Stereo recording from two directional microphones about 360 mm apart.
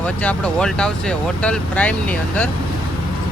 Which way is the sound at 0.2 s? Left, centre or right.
Centre.